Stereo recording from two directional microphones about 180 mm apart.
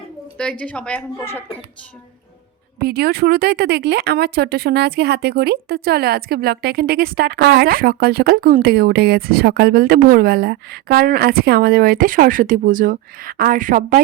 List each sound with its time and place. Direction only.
0.6 s a woman's voice: 5° left (ahead or behind)
2.8 s speech: 60° right (ahead or behind)